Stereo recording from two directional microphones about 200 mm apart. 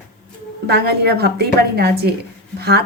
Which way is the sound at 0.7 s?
55° right (ahead or behind).